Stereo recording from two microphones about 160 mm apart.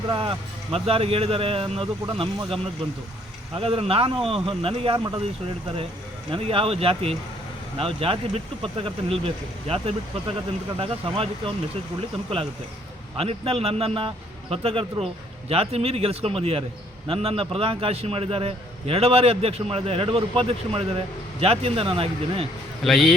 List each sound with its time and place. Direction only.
0.1 s a man's voice: 35° right (ahead or behind)
6.3 s a man's voice: 35° right (ahead or behind)
13.1 s a man's voice: 40° right (ahead or behind)
22.8 s a man's voice: centre (ahead or behind)